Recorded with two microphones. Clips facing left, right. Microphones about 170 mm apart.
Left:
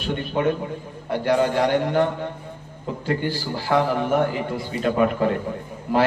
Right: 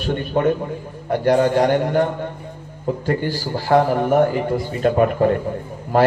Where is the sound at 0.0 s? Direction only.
45° right (ahead or behind).